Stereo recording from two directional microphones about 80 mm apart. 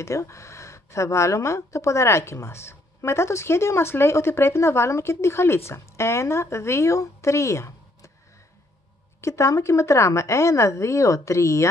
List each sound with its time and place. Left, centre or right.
0.0 s speech: left
9.2 s speech: left